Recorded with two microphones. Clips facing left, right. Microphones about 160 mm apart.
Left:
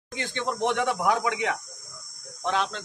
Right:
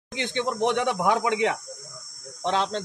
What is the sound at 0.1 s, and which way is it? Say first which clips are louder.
A man's voice: right 3 dB; 20° right (ahead or behind).